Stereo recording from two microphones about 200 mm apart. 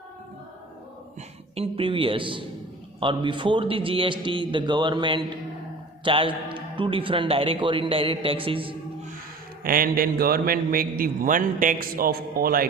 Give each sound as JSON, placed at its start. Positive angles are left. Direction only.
{"t": 1.5, "sound": "a man's voice", "side_deg": -30}
{"t": 9.6, "sound": "a man's voice", "side_deg": -45}